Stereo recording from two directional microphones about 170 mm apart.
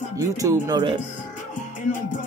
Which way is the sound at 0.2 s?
20° right (ahead or behind).